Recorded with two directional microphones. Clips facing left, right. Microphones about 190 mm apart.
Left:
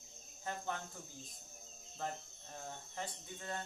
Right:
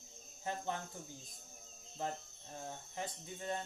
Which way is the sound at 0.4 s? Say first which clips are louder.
Right 2 dB; 20° right (ahead or behind).